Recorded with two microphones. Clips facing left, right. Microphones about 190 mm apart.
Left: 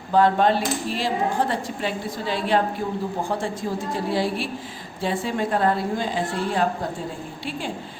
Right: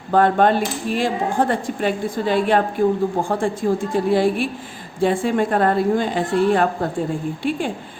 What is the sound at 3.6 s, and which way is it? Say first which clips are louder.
A woman's voice: right 7 dB; 60° right (ahead or behind).